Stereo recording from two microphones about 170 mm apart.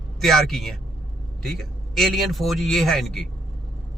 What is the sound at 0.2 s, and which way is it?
Speech, centre (ahead or behind).